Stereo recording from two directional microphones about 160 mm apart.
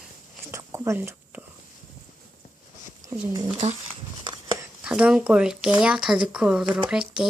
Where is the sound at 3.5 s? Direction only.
40° right (ahead or behind).